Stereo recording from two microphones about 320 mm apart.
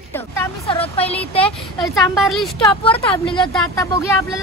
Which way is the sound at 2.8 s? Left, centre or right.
Centre.